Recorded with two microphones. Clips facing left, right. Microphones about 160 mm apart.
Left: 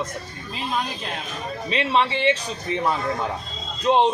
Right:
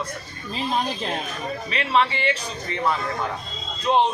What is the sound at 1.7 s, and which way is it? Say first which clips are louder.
A man's voice: left 1 dB; 25° left (ahead or behind).